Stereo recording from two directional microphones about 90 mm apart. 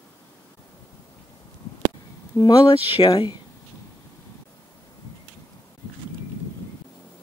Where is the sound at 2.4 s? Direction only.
75° left (ahead or behind).